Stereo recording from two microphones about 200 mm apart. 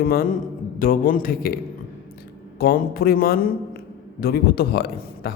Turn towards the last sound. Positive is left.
turn(degrees=50)  # may be behind; listen again after turning